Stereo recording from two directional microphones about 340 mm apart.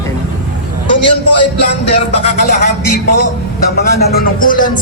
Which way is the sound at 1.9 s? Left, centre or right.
Centre.